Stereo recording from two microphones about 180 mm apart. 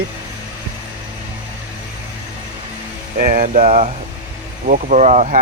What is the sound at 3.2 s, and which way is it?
Speech, 45° right (ahead or behind).